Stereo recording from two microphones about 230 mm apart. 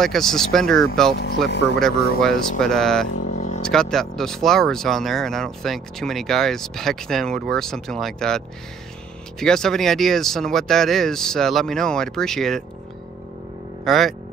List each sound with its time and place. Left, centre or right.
0.0 s speech: centre
1.5 s speech: left
1.8 s speech: centre
3.3 s vehicle: left
3.6 s speech: centre
9.4 s speech: centre
13.8 s speech: centre